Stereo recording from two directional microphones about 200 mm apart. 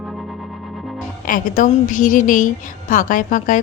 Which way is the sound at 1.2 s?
40° left (ahead or behind).